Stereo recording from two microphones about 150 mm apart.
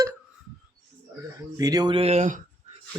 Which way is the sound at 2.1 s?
50° right (ahead or behind).